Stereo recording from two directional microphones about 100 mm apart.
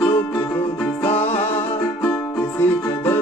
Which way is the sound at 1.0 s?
90° left.